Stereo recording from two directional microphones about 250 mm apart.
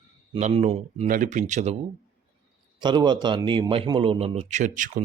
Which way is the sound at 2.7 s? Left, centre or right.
Centre.